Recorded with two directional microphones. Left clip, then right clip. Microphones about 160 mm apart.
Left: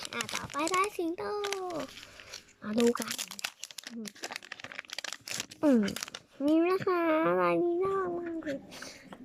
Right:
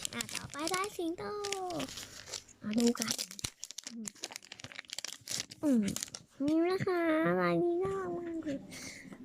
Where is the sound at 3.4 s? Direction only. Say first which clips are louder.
Left 4 dB; 5° left (ahead or behind).